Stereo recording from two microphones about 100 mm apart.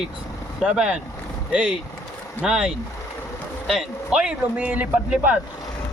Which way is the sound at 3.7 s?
5° right (ahead or behind).